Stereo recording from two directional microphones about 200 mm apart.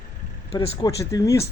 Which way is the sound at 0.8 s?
15° left (ahead or behind).